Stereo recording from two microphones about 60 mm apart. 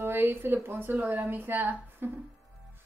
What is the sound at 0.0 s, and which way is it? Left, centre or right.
A woman's voice, right.